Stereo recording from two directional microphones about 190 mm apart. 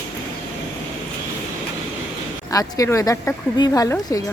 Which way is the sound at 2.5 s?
20° left (ahead or behind).